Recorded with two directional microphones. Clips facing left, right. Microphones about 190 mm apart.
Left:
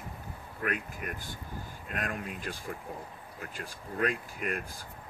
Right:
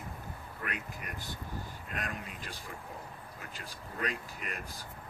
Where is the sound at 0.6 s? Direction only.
50° left (ahead or behind).